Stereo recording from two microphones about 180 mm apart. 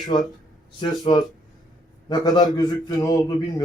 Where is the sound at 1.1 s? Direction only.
30° left (ahead or behind).